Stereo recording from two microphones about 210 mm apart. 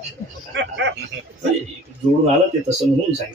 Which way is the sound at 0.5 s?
60° right (ahead or behind).